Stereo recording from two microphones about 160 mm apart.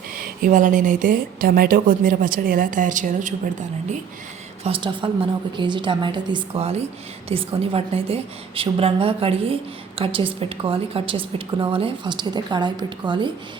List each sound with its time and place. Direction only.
0.4 s a woman's voice: 55° right (ahead or behind)
4.6 s a woman's voice: 30° right (ahead or behind)